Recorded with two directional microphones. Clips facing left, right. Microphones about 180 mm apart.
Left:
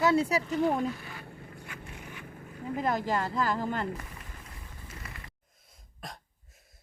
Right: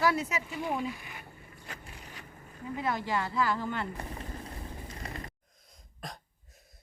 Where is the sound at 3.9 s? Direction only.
35° right (ahead or behind).